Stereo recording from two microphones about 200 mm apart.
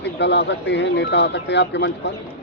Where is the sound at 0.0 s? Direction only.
60° left (ahead or behind).